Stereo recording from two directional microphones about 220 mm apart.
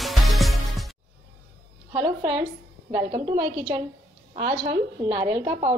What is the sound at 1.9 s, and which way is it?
A woman's voice, 25° right (ahead or behind).